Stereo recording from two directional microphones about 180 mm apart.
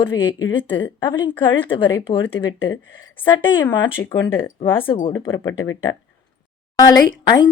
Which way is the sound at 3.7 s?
25° left (ahead or behind).